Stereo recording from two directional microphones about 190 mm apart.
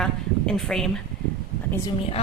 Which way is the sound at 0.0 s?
5° left (ahead or behind).